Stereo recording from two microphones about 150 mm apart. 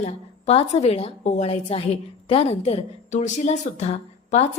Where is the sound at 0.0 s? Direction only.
45° left (ahead or behind).